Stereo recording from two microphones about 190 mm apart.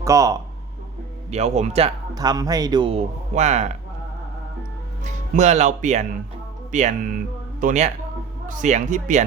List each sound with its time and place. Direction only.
0.0 s speech: 15° right (ahead or behind)
1.3 s speech: 35° right (ahead or behind)
2.1 s speech: 20° right (ahead or behind)
3.3 s speech: 35° right (ahead or behind)
5.0 s speech: 40° right (ahead or behind)